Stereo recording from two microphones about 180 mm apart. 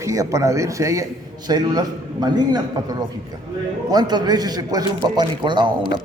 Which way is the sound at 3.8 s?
20° right (ahead or behind).